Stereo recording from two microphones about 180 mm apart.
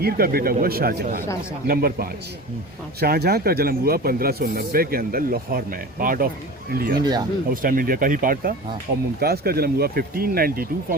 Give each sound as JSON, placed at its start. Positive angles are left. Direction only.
{"t": 0.0, "sound": "speech", "side_deg": -55}
{"t": 7.0, "sound": "speech", "side_deg": -20}
{"t": 7.5, "sound": "speech", "side_deg": -50}